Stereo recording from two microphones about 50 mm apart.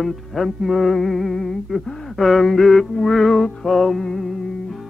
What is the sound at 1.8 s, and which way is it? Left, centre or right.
Speech, centre.